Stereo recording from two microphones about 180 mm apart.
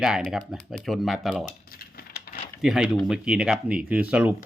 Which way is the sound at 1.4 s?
55° left (ahead or behind).